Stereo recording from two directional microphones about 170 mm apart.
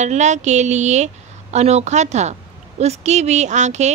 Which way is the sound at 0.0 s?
45° right (ahead or behind).